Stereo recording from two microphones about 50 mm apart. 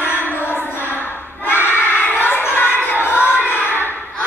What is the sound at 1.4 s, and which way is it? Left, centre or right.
Crowd, left.